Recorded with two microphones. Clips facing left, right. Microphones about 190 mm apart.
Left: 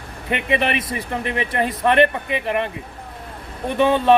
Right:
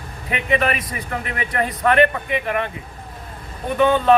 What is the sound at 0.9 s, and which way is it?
Speech, 30° left (ahead or behind).